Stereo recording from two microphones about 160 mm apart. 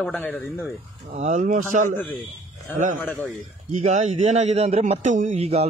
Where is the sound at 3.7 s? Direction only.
45° right (ahead or behind).